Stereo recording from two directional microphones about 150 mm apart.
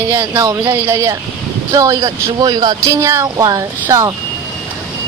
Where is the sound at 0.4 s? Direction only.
20° right (ahead or behind).